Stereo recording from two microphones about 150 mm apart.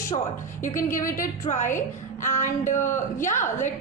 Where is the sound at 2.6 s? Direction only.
55° left (ahead or behind).